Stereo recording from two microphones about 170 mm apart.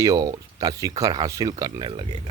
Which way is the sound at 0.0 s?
20° right (ahead or behind).